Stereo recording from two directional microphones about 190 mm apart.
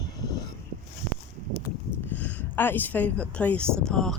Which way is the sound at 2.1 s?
10° left (ahead or behind).